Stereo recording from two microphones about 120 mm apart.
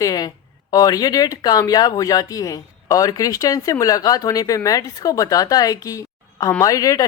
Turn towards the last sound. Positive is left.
turn(degrees=30)  # may be behind; listen again after turning